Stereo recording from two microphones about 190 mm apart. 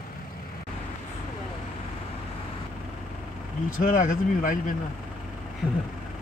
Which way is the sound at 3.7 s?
45° left (ahead or behind).